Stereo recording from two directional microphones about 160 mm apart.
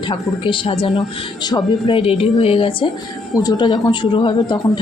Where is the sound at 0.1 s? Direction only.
30° left (ahead or behind).